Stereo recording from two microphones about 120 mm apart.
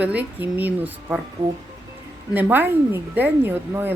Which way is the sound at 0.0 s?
10° right (ahead or behind).